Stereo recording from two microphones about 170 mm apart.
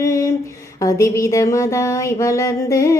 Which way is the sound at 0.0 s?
15° left (ahead or behind).